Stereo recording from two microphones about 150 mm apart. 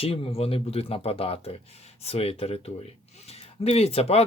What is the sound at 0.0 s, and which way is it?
Speech, 40° left (ahead or behind).